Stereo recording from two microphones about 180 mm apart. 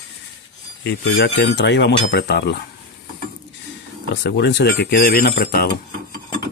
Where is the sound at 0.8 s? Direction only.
70° left (ahead or behind).